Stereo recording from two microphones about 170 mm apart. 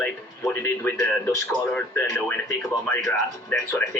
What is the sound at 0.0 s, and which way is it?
A man's voice, 15° left (ahead or behind).